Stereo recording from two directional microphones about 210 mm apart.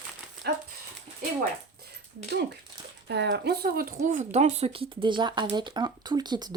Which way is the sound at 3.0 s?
55° right (ahead or behind).